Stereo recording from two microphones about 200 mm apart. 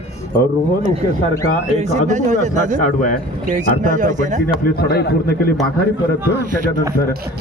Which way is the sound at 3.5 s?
40° right (ahead or behind).